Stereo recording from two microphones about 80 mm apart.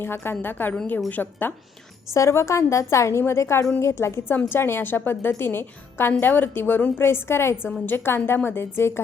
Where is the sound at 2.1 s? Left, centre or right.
Left.